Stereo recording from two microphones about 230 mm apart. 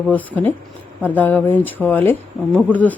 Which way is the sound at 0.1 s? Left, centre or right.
Centre.